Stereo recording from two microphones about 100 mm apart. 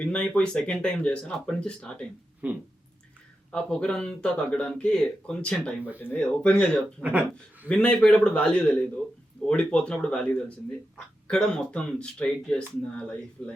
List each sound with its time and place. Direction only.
0.0 s speech: 10° left (ahead or behind)
2.4 s speech: 15° right (ahead or behind)
3.5 s speech: 10° left (ahead or behind)
7.0 s speech: 15° right (ahead or behind)
7.7 s speech: 10° left (ahead or behind)